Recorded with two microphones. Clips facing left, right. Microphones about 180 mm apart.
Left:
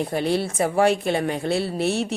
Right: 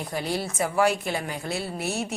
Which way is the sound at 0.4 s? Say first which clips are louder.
Left 1 dB; 30° left (ahead or behind).